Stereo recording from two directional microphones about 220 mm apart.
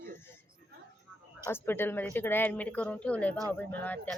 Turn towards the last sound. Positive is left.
turn(degrees=5)  # may be behind; listen again after turning